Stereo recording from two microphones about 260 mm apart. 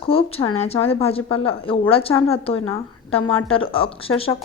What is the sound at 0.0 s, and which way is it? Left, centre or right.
A woman's voice, left.